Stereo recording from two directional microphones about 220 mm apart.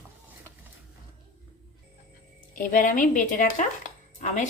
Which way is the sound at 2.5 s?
40° left (ahead or behind).